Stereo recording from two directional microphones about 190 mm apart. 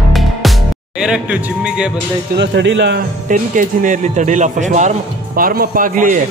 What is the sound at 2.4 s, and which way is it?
Speech, 70° right (ahead or behind).